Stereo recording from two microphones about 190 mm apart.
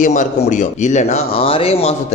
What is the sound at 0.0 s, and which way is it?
Speech, 40° left (ahead or behind).